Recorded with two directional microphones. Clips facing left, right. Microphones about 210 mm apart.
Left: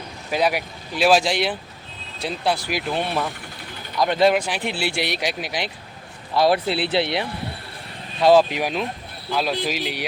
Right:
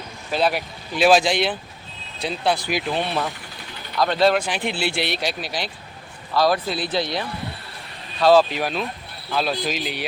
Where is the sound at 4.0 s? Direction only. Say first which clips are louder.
Left 1 dB; 15° left (ahead or behind).